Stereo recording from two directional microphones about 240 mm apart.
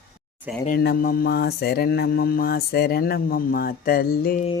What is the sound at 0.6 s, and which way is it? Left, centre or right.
Child singing, left.